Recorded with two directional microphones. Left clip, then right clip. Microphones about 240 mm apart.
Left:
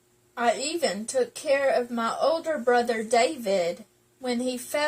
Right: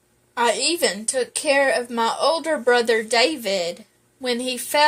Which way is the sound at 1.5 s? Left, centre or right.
Right.